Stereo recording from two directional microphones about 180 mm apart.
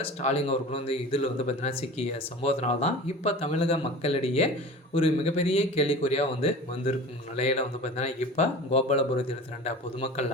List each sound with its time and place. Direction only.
0.0 s speech: 35° left (ahead or behind)